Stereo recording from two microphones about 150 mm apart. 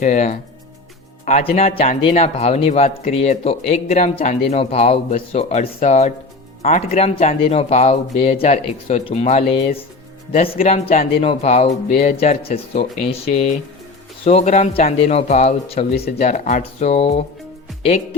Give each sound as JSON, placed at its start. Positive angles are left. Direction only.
{"t": 0.0, "sound": "speech", "side_deg": 50}